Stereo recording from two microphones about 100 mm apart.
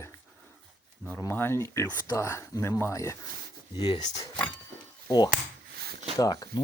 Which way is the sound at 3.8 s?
50° left (ahead or behind).